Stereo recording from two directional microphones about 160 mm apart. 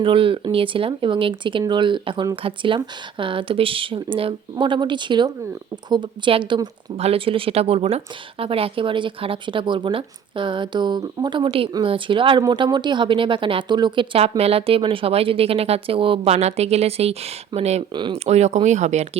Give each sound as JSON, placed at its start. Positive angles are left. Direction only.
{"t": 0.0, "sound": "speech", "side_deg": -35}
{"t": 17.9, "sound": "speech", "side_deg": -30}
{"t": 18.3, "sound": "speech", "side_deg": -45}